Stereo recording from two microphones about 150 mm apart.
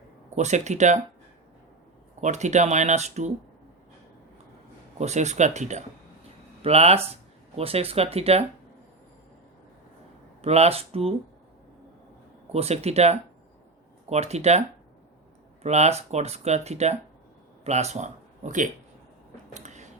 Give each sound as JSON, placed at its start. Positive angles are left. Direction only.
{"t": 0.3, "sound": "speech", "side_deg": -50}
{"t": 2.2, "sound": "speech", "side_deg": -50}
{"t": 4.9, "sound": "speech", "side_deg": -50}
{"t": 10.4, "sound": "speech", "side_deg": -45}
{"t": 12.5, "sound": "speech", "side_deg": -45}
{"t": 15.6, "sound": "speech", "side_deg": -50}
{"t": 19.5, "sound": "a sound", "side_deg": -50}